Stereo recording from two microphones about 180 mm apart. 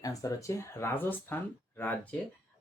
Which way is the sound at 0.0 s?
20° left (ahead or behind).